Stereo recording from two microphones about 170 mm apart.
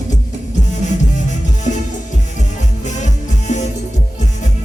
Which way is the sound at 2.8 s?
45° left (ahead or behind).